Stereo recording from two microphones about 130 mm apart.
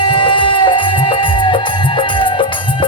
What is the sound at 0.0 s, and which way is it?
Music, 40° left (ahead or behind).